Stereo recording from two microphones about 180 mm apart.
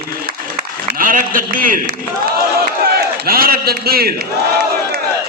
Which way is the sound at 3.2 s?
55° right (ahead or behind).